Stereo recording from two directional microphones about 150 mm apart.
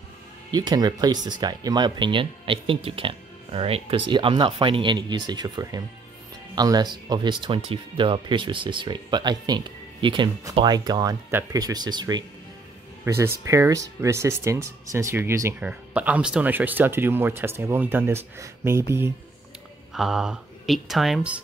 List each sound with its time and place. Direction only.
0.5 s speech: 25° right (ahead or behind)
19.9 s speech: centre (ahead or behind)